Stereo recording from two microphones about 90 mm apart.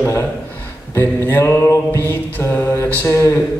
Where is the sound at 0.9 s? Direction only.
25° left (ahead or behind).